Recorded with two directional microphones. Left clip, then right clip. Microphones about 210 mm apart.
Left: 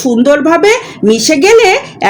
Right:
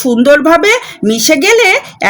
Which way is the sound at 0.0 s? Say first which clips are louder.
Right 1 dB; 55° right (ahead or behind).